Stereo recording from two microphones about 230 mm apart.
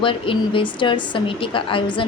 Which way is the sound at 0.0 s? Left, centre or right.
Left.